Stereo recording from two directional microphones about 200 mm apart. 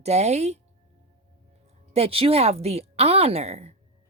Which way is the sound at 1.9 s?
30° right (ahead or behind).